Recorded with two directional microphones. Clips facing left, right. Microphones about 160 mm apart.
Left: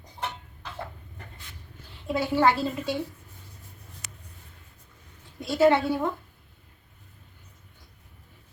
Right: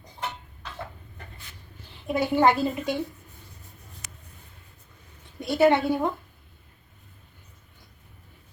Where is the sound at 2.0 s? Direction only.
15° right (ahead or behind).